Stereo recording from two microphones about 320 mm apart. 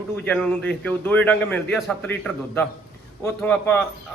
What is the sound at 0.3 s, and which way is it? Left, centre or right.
A man's voice, centre.